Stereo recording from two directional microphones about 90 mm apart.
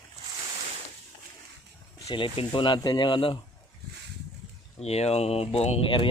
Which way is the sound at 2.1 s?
75° left (ahead or behind).